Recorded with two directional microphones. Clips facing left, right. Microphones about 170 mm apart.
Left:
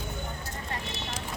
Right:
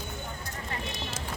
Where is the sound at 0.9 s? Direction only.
10° left (ahead or behind).